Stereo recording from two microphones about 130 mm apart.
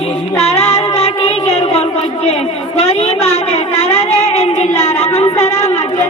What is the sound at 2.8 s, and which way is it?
Child singing, 55° left (ahead or behind).